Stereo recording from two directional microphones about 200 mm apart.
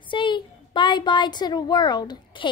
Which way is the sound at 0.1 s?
25° left (ahead or behind).